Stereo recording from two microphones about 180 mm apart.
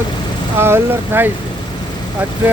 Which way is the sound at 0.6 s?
15° right (ahead or behind).